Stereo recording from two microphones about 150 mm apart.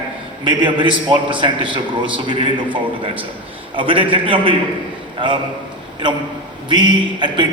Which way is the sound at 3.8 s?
35° right (ahead or behind).